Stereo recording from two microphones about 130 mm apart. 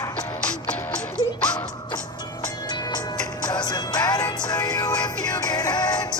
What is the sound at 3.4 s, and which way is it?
Music, 30° left (ahead or behind).